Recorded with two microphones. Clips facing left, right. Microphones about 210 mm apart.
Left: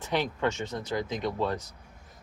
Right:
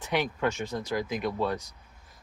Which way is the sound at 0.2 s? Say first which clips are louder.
Right 1 dB; 10° right (ahead or behind).